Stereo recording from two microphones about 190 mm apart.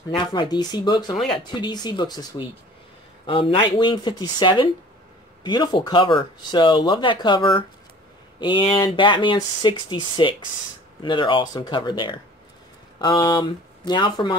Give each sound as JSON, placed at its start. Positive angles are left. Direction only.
{"t": 0.1, "sound": "speech", "side_deg": 25}